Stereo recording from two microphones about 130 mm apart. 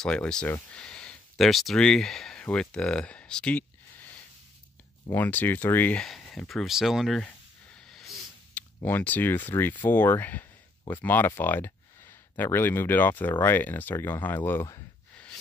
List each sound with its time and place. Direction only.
0.0 s speech: 5° left (ahead or behind)
5.1 s speech: 15° left (ahead or behind); by 7.2 s centre (ahead or behind)
7.2 s a sound: 5° left (ahead or behind)
8.8 s speech: 15° left (ahead or behind)